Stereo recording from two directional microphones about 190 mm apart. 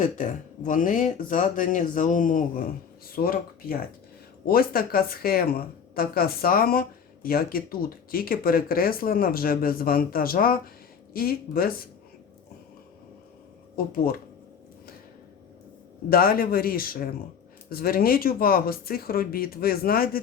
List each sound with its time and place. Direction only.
0.0 s speech: 40° left (ahead or behind)
13.7 s speech: 50° left (ahead or behind)
16.0 s speech: 50° left (ahead or behind)